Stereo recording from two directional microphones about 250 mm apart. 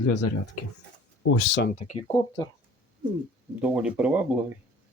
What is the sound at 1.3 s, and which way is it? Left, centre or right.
Speech, left.